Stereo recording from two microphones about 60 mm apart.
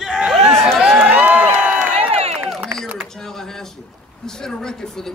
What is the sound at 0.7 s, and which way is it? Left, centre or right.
Crowd, centre.